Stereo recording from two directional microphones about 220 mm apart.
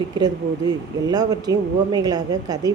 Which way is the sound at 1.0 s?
15° right (ahead or behind).